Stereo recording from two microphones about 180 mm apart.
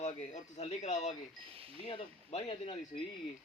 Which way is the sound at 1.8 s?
35° left (ahead or behind).